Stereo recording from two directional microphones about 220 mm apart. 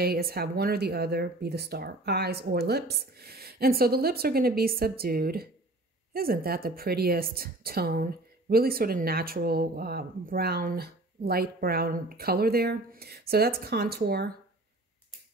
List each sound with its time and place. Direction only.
0.0 s a woman's voice: 45° right (ahead or behind)